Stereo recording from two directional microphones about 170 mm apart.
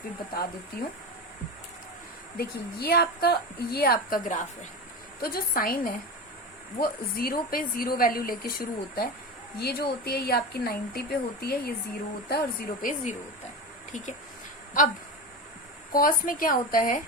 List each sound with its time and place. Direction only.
0.8 s a woman's voice: 65° left (ahead or behind)
2.4 s a woman's voice: 65° left (ahead or behind)
12.3 s a woman's voice: 55° left (ahead or behind)
15.9 s a woman's voice: 55° left (ahead or behind)